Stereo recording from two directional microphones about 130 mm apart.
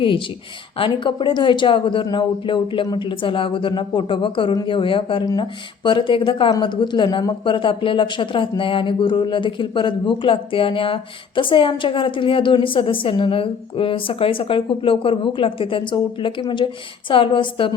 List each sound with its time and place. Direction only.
0.0 s speech: 40° left (ahead or behind)